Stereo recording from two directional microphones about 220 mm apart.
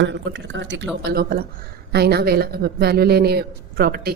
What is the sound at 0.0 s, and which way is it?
Speech, 55° right (ahead or behind).